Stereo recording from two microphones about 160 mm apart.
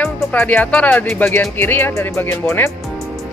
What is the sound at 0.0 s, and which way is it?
Speech, 10° left (ahead or behind).